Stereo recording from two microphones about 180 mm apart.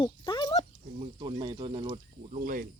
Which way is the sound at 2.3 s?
50° right (ahead or behind).